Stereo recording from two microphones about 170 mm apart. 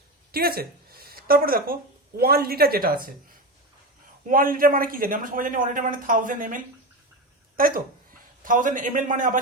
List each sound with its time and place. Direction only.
0.3 s speech: 65° right (ahead or behind)
4.3 s a man's voice: 55° right (ahead or behind)